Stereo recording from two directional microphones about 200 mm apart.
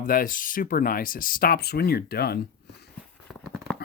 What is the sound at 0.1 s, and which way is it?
Speech, 45° left (ahead or behind).